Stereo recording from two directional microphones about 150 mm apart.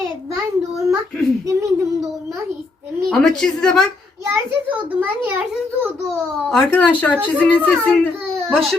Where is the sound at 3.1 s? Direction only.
5° left (ahead or behind).